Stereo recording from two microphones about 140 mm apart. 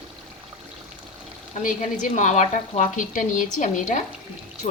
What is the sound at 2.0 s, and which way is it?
A woman's voice, 60° left (ahead or behind).